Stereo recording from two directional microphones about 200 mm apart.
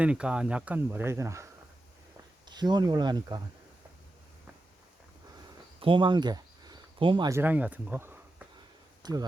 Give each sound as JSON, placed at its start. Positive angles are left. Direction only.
{"t": 0.0, "sound": "speech", "side_deg": -5}
{"t": 2.5, "sound": "speech", "side_deg": -20}
{"t": 5.8, "sound": "speech", "side_deg": -25}